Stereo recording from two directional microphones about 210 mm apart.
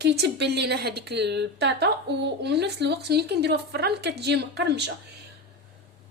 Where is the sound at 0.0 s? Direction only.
50° right (ahead or behind).